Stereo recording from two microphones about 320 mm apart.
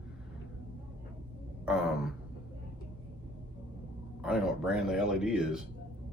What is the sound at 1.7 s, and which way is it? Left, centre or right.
Sigh, centre.